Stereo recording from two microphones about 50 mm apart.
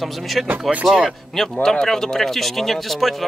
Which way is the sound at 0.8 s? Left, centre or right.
Centre.